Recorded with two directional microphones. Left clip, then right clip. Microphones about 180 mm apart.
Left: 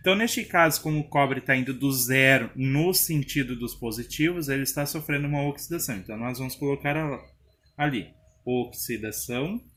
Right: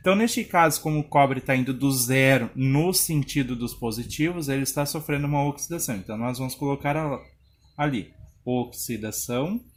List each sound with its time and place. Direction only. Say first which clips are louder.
0.0 s speech: right 1 dB; 55° right (ahead or behind)
8.4 s speech: even; 60° right (ahead or behind)